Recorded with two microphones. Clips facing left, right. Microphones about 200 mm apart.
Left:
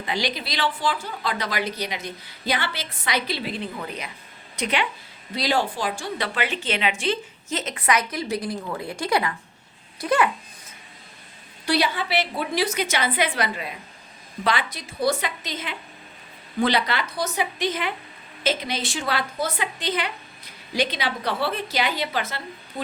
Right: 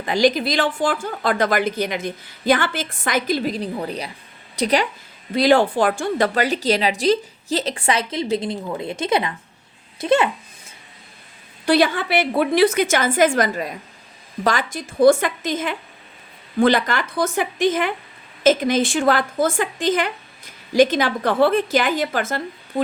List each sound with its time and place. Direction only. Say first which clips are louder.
0.1 s a woman's voice: right 10 dB; 45° right (ahead or behind)
5.3 s a woman's voice: right 9 dB; 55° right (ahead or behind); by 10.2 s 25° right (ahead or behind)
11.6 s a woman's voice: right 6 dB; 50° right (ahead or behind)